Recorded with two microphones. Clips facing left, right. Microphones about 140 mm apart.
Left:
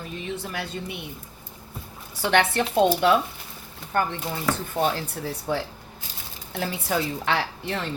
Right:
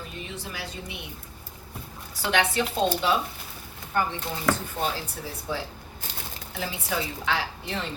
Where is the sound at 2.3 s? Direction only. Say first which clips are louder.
Left 4 dB; 55° left (ahead or behind).